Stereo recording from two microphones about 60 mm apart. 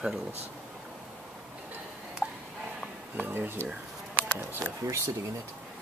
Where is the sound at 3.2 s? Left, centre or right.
Right.